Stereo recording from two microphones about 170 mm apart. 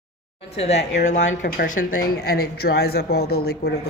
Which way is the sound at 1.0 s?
45° left (ahead or behind).